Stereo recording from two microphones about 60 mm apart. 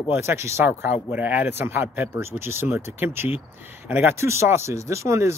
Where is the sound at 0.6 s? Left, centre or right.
Right.